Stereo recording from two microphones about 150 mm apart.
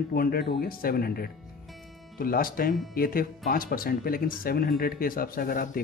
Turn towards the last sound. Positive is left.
turn(degrees=75)  # may be behind; listen again after turning